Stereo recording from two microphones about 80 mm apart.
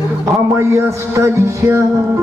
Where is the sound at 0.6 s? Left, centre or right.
Right.